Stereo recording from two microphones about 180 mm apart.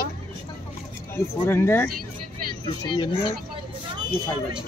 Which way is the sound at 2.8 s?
25° left (ahead or behind).